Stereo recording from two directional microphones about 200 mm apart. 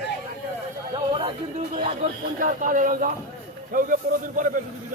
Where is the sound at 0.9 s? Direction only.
25° right (ahead or behind).